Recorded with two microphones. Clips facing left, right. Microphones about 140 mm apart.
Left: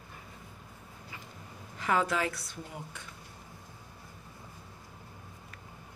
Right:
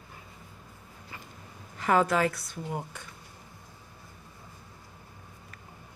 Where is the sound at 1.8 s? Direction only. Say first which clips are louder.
Right 5 dB; 50° right (ahead or behind).